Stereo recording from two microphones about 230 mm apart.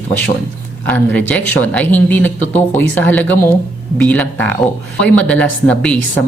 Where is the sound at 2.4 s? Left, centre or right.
Left.